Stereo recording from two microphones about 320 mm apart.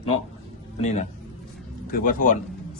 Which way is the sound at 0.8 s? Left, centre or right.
Left.